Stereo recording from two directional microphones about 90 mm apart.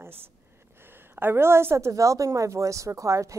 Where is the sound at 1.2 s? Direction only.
25° right (ahead or behind).